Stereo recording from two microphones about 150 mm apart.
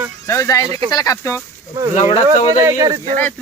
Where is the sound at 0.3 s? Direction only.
20° left (ahead or behind).